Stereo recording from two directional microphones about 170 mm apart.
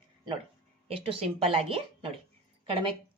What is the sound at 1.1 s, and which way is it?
Speech, 35° right (ahead or behind).